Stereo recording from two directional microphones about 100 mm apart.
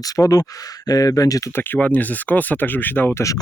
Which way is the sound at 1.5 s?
20° left (ahead or behind).